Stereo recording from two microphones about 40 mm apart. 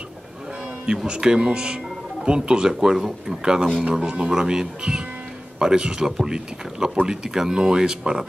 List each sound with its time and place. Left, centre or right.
1.0 s speech: right